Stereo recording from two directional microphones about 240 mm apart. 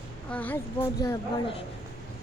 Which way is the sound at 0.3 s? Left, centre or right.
Centre.